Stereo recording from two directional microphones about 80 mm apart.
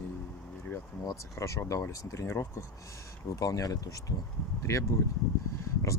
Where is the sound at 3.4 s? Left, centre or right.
Left.